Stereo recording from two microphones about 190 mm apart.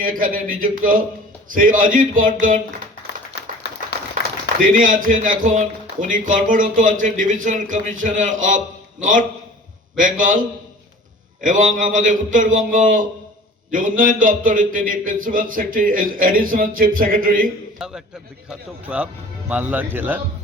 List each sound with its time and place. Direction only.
0.0 s a man's voice: 45° right (ahead or behind)
4.7 s a man's voice: 45° right (ahead or behind)
17.7 s a man's voice: 5° right (ahead or behind)